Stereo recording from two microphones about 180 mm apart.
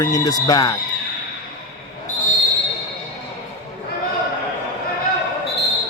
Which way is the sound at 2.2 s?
45° left (ahead or behind).